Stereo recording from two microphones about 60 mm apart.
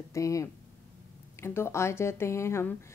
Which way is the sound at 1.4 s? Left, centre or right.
Left.